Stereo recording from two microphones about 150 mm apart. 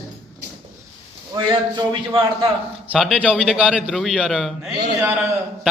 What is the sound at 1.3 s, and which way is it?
A man's voice, 30° right (ahead or behind).